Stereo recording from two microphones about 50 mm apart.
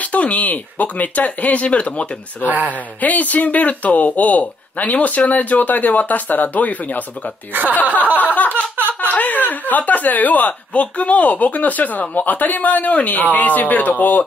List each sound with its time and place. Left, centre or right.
0.0 s speech: left
2.4 s speech: right
3.0 s speech: left
7.5 s speech: right
8.4 s a sound: left
8.7 s a sound: right
9.1 s speech: left